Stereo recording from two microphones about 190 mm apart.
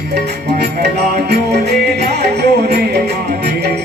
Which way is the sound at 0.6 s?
60° right (ahead or behind).